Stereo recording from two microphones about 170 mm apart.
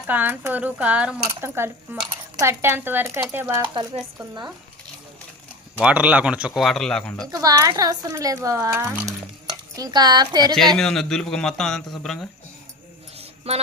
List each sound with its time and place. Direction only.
0.1 s speech: 10° right (ahead or behind)
5.8 s speech: 5° right (ahead or behind)
7.3 s speech: 20° right (ahead or behind)
10.8 s speech: 5° left (ahead or behind)
13.1 s a sound: 35° right (ahead or behind)